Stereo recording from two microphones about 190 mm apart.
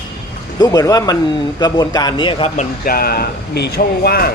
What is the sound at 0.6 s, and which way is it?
A man's voice, 20° left (ahead or behind).